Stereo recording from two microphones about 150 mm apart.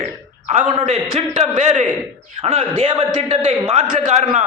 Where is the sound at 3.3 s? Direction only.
45° right (ahead or behind).